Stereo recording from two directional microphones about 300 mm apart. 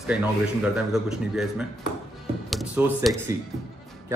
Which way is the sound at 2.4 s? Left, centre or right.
Centre.